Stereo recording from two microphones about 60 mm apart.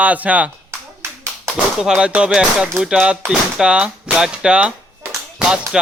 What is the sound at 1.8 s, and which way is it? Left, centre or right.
Speech, centre.